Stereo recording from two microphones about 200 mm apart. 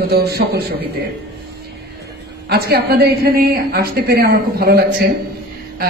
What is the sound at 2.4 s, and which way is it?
A man's voice, 50° right (ahead or behind).